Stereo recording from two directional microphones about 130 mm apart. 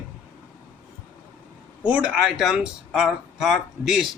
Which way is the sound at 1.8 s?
10° right (ahead or behind).